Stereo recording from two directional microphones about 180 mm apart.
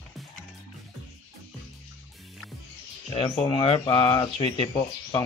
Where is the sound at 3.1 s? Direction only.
30° left (ahead or behind).